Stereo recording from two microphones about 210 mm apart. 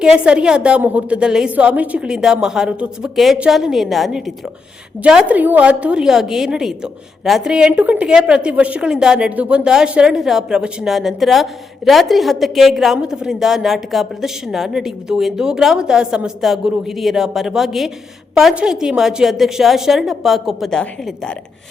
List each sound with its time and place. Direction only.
0.0 s a woman's voice: 5° right (ahead or behind)